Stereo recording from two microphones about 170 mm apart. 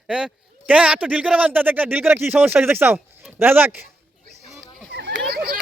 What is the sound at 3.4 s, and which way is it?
Speech, 10° right (ahead or behind).